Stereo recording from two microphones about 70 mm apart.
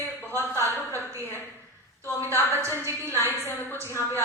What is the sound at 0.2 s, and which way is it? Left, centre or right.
Speech, left.